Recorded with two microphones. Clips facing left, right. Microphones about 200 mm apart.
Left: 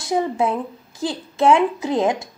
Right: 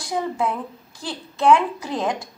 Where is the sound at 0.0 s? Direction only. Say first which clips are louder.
Left 4 dB; 25° left (ahead or behind).